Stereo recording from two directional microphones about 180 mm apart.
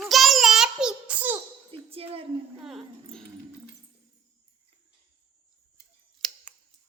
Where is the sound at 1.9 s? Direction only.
30° right (ahead or behind).